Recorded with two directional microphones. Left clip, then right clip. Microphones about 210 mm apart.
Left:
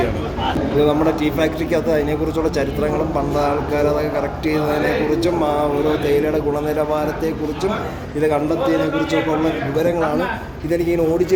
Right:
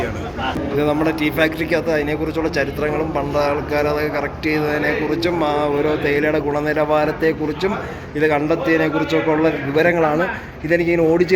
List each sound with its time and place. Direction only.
0.8 s a man's voice: centre (ahead or behind)